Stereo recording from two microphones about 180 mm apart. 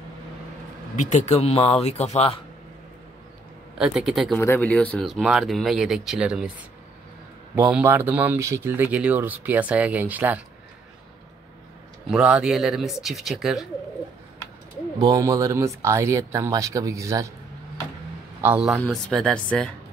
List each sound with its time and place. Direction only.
0.9 s speech: 40° left (ahead or behind)
3.7 s speech: 5° right (ahead or behind)
4.4 s speech: 10° left (ahead or behind); by 6.5 s 5° right (ahead or behind)
7.7 s speech: 10° right (ahead or behind)
12.1 s speech: 5° right (ahead or behind)
15.0 s speech: 20° right (ahead or behind)
18.4 s speech: 5° right (ahead or behind)